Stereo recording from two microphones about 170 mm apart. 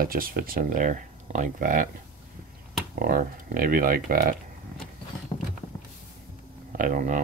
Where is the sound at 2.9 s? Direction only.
60° right (ahead or behind).